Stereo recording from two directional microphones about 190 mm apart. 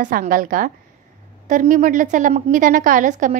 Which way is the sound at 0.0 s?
45° right (ahead or behind).